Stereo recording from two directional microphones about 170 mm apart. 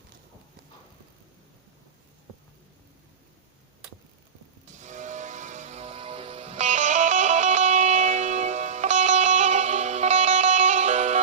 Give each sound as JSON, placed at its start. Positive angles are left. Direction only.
{"t": 4.7, "sound": "music", "side_deg": -45}